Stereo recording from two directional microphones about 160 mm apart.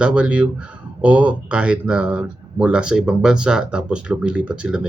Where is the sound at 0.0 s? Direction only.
5° right (ahead or behind).